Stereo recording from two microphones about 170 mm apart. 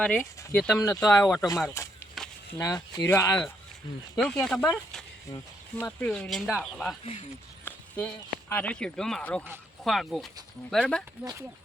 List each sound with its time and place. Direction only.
0.0 s speech: 5° left (ahead or behind)
1.0 s speech: 20° left (ahead or behind)
2.2 s a sound: centre (ahead or behind)
2.6 s speech: 20° left (ahead or behind)
4.1 s speech: centre (ahead or behind)
7.0 s speech: 35° left (ahead or behind)
7.6 s speech: 10° left (ahead or behind)
11.2 s speech: 15° right (ahead or behind)